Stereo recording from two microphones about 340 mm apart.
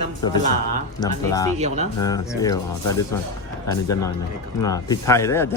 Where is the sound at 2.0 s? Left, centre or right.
Centre.